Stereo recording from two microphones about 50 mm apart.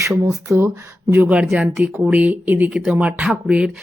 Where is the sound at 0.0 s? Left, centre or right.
Right.